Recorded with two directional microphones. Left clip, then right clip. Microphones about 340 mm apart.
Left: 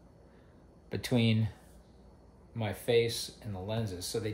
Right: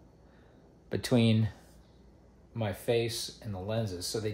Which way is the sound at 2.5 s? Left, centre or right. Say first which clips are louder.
Left 1 dB; centre.